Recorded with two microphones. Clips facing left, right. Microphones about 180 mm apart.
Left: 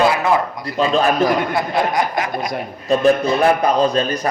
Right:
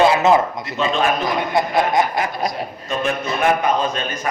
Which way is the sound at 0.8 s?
35° left (ahead or behind).